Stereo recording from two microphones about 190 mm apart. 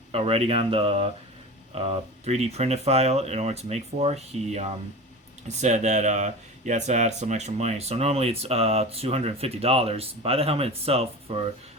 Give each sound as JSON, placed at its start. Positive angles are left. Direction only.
{"t": 0.1, "sound": "speech", "side_deg": -30}